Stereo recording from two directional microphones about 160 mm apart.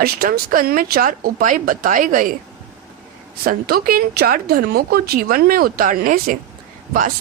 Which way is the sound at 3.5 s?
70° right (ahead or behind).